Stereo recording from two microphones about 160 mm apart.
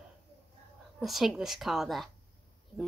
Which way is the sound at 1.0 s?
Centre (ahead or behind).